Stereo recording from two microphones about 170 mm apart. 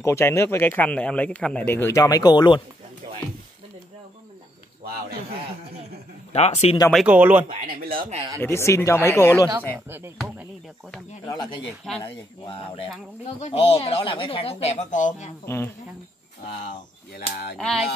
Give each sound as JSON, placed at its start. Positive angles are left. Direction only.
{"t": 0.0, "sound": "speech", "side_deg": 15}
{"t": 6.3, "sound": "speech", "side_deg": 40}
{"t": 6.9, "sound": "speech", "side_deg": -5}
{"t": 7.6, "sound": "speech", "side_deg": -60}
{"t": 8.4, "sound": "speech", "side_deg": 15}
{"t": 9.8, "sound": "speech", "side_deg": -15}
{"t": 12.0, "sound": "speech", "side_deg": 30}
{"t": 15.4, "sound": "speech", "side_deg": 15}
{"t": 17.6, "sound": "speech", "side_deg": 0}